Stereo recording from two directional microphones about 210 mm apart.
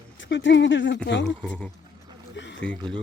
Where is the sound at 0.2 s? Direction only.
60° left (ahead or behind).